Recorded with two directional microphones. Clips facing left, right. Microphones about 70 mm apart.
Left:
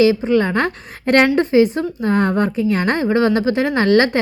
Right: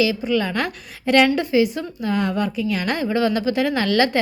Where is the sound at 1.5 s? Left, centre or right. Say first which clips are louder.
Left 5 dB; left.